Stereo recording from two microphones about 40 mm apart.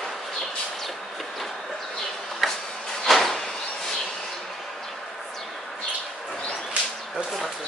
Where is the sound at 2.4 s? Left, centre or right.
Centre.